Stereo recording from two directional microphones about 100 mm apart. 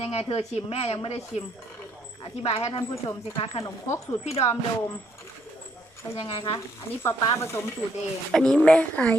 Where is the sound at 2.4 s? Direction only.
80° left.